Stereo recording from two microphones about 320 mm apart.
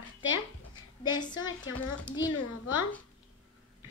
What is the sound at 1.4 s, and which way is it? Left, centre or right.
Speech, left.